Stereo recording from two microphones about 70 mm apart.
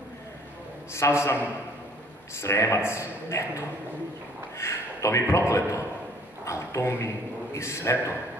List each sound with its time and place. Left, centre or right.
0.9 s a man's voice: left
2.4 s a man's voice: left